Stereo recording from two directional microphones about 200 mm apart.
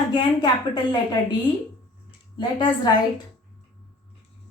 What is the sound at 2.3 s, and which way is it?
Speech, 20° left (ahead or behind).